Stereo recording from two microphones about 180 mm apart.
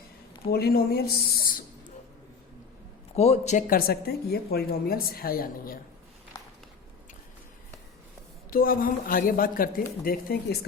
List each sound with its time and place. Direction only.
0.5 s speech: 60° left (ahead or behind)
3.2 s speech: 40° left (ahead or behind); by 5.8 s 55° left (ahead or behind)
6.3 s a sound: 15° left (ahead or behind)
8.4 s speech: 55° left (ahead or behind)